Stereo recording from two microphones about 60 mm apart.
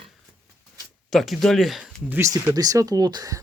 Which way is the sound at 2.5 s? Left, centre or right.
Right.